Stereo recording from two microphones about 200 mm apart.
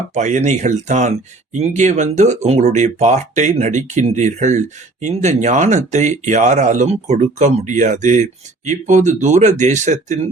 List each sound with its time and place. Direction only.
0.1 s speech: 35° right (ahead or behind)